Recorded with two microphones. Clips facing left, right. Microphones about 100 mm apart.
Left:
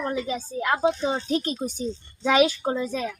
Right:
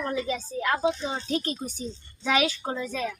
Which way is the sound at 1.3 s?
20° left (ahead or behind).